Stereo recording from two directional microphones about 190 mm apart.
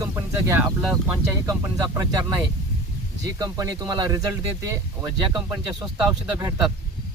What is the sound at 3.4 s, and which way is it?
Speech, 20° right (ahead or behind).